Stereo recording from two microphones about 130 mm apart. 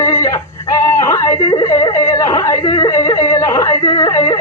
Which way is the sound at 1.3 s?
40° left (ahead or behind).